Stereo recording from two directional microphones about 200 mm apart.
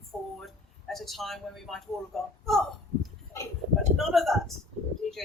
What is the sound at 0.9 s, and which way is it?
A woman's voice, centre (ahead or behind).